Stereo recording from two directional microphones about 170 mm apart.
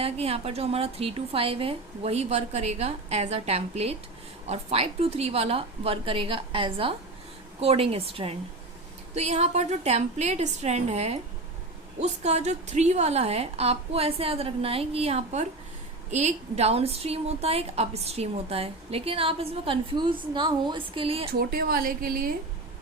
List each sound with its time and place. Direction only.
0.0 s a woman's voice: 35° right (ahead or behind)
21.3 s a woman's voice: 65° right (ahead or behind)